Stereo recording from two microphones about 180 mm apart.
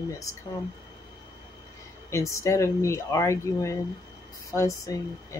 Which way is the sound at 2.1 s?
15° left (ahead or behind).